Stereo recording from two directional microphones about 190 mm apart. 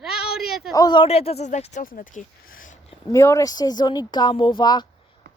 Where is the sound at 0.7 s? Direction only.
20° left (ahead or behind); by 2.7 s 45° left (ahead or behind).